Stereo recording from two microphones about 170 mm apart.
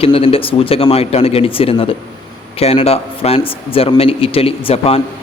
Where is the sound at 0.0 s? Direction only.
35° left (ahead or behind).